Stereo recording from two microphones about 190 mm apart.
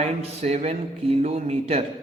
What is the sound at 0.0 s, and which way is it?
A man's voice, 35° right (ahead or behind).